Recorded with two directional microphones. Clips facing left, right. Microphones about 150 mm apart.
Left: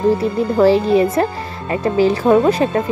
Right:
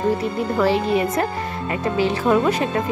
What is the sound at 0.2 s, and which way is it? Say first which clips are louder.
Speech: left 6 dB; 35° left (ahead or behind).